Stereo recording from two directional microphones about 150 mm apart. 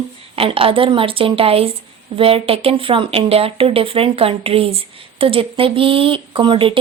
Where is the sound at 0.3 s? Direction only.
40° right (ahead or behind).